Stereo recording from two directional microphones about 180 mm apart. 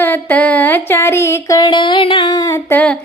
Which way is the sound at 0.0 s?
10° left (ahead or behind).